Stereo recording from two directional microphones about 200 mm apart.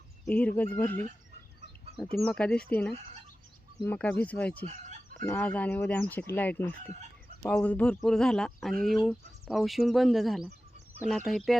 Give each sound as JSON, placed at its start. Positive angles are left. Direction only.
{"t": 0.3, "sound": "speech", "side_deg": 5}
{"t": 2.1, "sound": "speech", "side_deg": 5}
{"t": 4.6, "sound": "speech", "side_deg": -35}
{"t": 5.2, "sound": "speech", "side_deg": 10}